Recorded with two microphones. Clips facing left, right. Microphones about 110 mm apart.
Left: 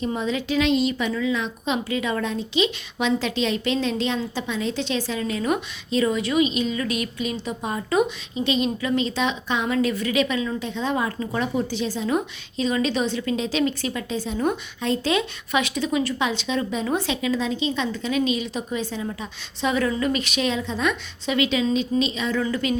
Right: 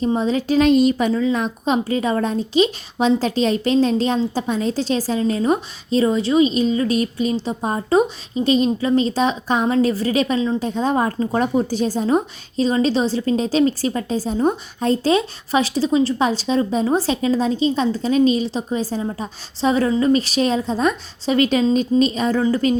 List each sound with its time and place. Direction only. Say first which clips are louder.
0.0 s a woman's voice: right 6 dB; 35° right (ahead or behind)
10.7 s a woman's voice: right 6 dB; 40° right (ahead or behind)